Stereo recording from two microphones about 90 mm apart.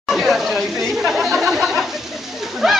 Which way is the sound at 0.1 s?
5° right (ahead or behind).